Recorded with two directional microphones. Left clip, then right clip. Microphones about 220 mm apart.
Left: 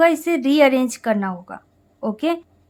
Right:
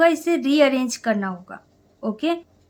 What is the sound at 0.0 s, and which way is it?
Speech, 15° left (ahead or behind).